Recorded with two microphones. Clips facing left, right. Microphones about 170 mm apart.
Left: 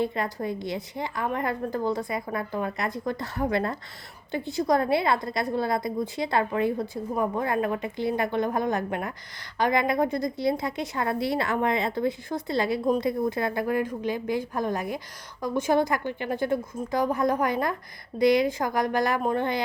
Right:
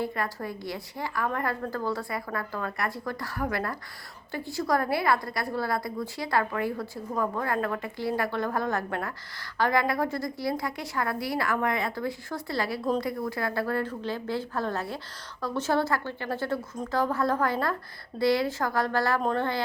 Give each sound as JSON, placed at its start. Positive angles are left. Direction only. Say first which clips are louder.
{"t": 0.0, "sound": "a woman's voice", "louder": "left 3 dB", "side_deg": 20}